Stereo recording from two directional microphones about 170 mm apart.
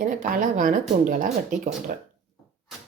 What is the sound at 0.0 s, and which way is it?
Speech, 50° right (ahead or behind).